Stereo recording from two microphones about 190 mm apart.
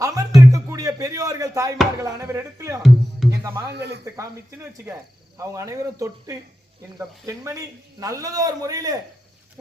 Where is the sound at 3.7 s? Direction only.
60° right (ahead or behind).